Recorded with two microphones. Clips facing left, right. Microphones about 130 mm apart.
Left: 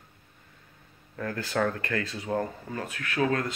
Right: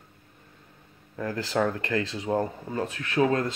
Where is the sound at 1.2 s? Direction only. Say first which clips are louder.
Right 2 dB; 20° right (ahead or behind).